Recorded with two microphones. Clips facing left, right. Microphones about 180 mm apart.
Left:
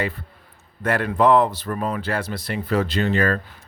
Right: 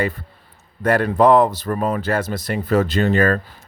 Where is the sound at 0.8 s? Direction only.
40° right (ahead or behind).